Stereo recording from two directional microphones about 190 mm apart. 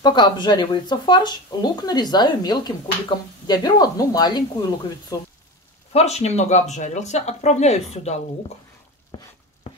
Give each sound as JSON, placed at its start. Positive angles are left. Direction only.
{"t": 0.0, "sound": "speech", "side_deg": 25}
{"t": 5.9, "sound": "speech", "side_deg": 35}
{"t": 9.1, "sound": "chopping", "side_deg": 25}